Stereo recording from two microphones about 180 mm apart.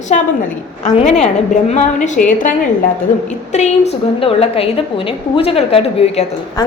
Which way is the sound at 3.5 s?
40° left (ahead or behind).